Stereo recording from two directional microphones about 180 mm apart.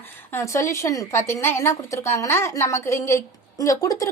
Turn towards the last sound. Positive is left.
turn(degrees=20)  # may be behind; listen again after turning